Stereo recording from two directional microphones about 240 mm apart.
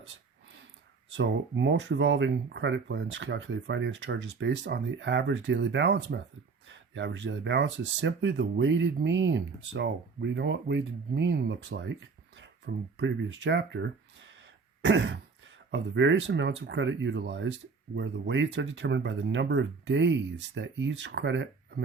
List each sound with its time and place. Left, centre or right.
1.1 s speech: right